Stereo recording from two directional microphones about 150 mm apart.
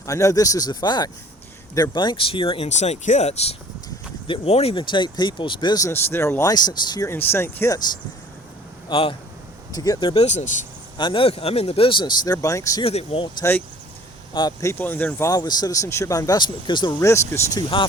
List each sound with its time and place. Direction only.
0.0 s speech: 20° left (ahead or behind)
7.1 s speech: 15° left (ahead or behind)
8.9 s speech: 35° left (ahead or behind)
9.7 s speech: 25° left (ahead or behind)
10.2 s speech: 50° left (ahead or behind)
10.9 s speech: 35° left (ahead or behind)
12.8 s speech: 40° left (ahead or behind)
13.4 s speech: 20° left (ahead or behind)
14.7 s speech: 10° left (ahead or behind)
15.3 s speech: 30° left (ahead or behind)
17.0 s speech: 20° left (ahead or behind)